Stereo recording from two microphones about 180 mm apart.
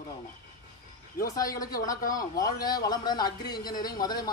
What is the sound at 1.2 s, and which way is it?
Speech, 20° left (ahead or behind).